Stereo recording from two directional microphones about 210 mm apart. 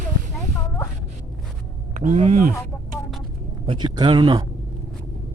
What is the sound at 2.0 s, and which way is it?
Speech, 35° right (ahead or behind).